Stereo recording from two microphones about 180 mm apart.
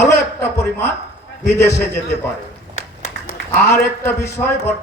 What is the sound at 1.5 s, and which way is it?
Speech, 15° left (ahead or behind).